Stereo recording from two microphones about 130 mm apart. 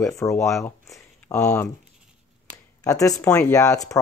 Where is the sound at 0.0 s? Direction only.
25° left (ahead or behind).